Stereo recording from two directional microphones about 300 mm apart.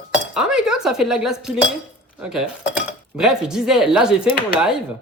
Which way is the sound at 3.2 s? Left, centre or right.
Centre.